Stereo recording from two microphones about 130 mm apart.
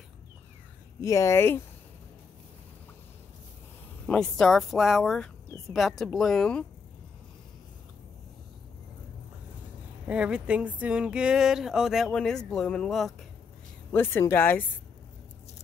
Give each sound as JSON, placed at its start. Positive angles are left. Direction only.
{"t": 1.0, "sound": "speech", "side_deg": 25}
{"t": 4.0, "sound": "speech", "side_deg": 5}
{"t": 10.0, "sound": "speech", "side_deg": -10}
{"t": 13.9, "sound": "speech", "side_deg": 20}